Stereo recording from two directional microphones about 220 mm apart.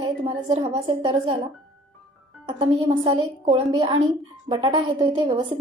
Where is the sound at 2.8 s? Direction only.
20° right (ahead or behind).